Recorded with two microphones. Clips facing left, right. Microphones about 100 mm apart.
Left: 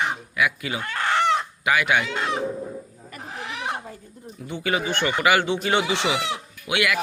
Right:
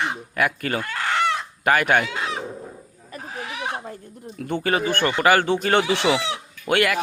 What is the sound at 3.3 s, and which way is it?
Goat, 5° right (ahead or behind).